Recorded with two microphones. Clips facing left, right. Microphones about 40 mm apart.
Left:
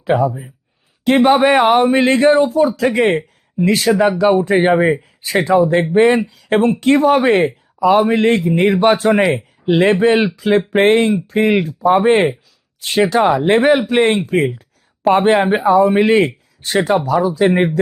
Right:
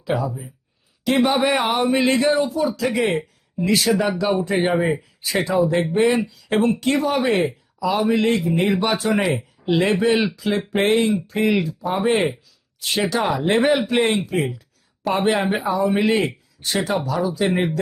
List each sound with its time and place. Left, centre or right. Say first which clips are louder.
0.0 s a man's voice: left 8 dB; left
5.9 s a man's voice: left 6 dB; left